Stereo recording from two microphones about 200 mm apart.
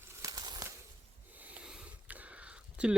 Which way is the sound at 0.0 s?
15° right (ahead or behind).